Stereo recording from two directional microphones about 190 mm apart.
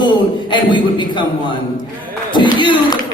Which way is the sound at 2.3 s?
25° left (ahead or behind).